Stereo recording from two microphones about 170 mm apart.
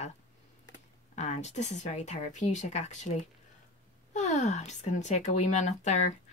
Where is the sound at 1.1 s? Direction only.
45° left (ahead or behind).